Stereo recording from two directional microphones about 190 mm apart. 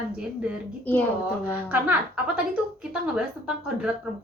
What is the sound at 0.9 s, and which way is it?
Speech, 10° left (ahead or behind).